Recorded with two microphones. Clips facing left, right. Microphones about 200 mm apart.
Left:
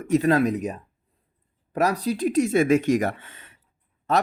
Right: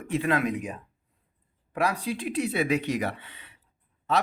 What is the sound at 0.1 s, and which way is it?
Speech, 40° left (ahead or behind).